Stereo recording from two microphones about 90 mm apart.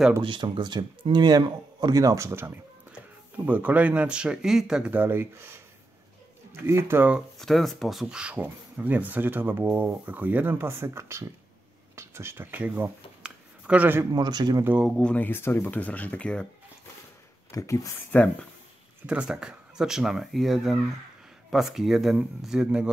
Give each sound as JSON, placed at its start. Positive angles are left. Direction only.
{"t": 0.2, "sound": "speech", "side_deg": -65}
{"t": 2.9, "sound": "speech", "side_deg": -15}
{"t": 4.9, "sound": "speech", "side_deg": -25}
{"t": 7.3, "sound": "speech", "side_deg": 0}
{"t": 13.2, "sound": "a sound", "side_deg": -15}
{"t": 14.1, "sound": "speech", "side_deg": -50}
{"t": 15.0, "sound": "speech", "side_deg": 15}
{"t": 17.5, "sound": "speech", "side_deg": 35}
{"t": 17.9, "sound": "speech", "side_deg": 15}
{"t": 19.0, "sound": "speech", "side_deg": -10}